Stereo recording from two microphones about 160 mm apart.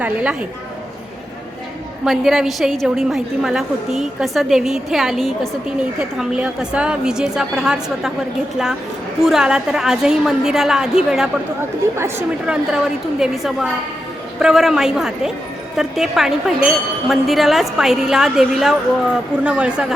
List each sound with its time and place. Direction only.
0.0 s a woman's voice: 10° right (ahead or behind)
2.0 s a woman's voice: centre (ahead or behind)
9.2 s a woman's voice: 5° right (ahead or behind)
11.9 s a woman's voice: 15° right (ahead or behind)
12.5 s a woman's voice: 5° right (ahead or behind)